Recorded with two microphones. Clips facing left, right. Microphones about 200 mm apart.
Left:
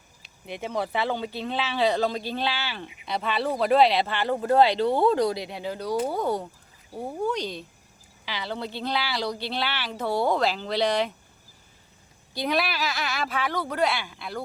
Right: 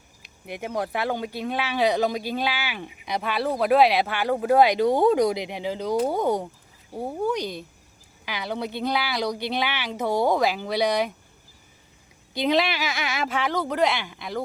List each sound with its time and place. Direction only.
0.4 s speech: 10° right (ahead or behind)
12.3 s speech: 20° right (ahead or behind)